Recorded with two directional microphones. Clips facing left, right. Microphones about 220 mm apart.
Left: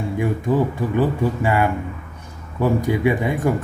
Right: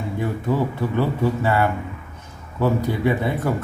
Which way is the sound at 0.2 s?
15° left (ahead or behind).